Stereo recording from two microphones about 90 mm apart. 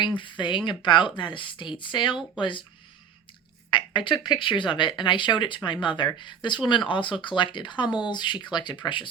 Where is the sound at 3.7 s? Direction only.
65° left (ahead or behind).